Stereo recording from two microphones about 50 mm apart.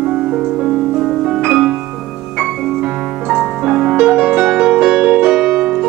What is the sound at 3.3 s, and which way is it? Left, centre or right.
Music, centre.